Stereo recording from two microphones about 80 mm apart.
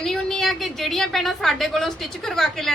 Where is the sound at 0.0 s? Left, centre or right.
Centre.